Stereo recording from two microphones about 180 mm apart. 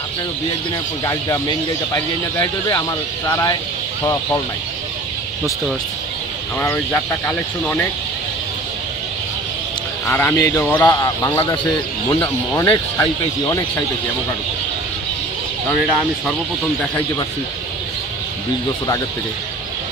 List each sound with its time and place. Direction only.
3.3 s speech: 20° left (ahead or behind)
6.6 s speech: 10° left (ahead or behind)
10.0 s speech: 10° left (ahead or behind)